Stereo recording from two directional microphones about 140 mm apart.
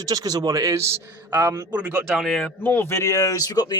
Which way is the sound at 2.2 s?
Centre (ahead or behind).